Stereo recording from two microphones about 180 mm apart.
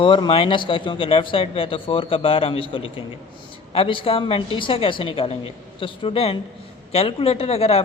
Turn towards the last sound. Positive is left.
turn(degrees=35)  # may be behind; listen again after turning